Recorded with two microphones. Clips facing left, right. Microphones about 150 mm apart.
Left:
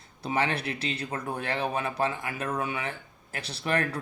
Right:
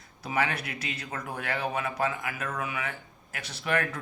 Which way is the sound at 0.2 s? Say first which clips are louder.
Left 1 dB; 30° left (ahead or behind).